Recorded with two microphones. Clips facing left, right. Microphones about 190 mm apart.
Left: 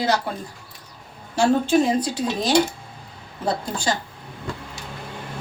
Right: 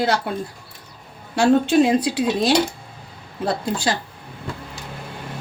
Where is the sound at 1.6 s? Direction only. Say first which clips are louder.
Right 3 dB; 70° right (ahead or behind).